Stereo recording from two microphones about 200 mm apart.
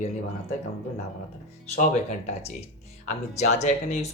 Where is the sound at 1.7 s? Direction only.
35° left (ahead or behind).